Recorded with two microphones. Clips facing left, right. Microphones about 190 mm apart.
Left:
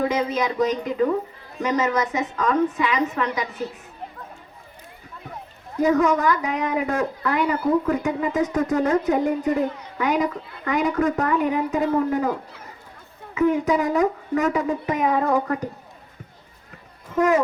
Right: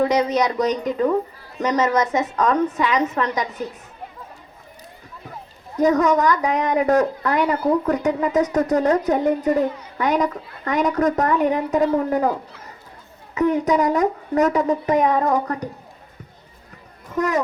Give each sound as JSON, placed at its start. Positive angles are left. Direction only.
{"t": 0.1, "sound": "a woman's voice", "side_deg": -40}
{"t": 5.8, "sound": "a woman's voice", "side_deg": -40}
{"t": 13.3, "sound": "a woman's voice", "side_deg": -40}
{"t": 17.1, "sound": "a woman's voice", "side_deg": -40}